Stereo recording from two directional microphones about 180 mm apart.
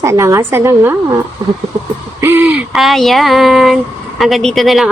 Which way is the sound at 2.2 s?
10° right (ahead or behind).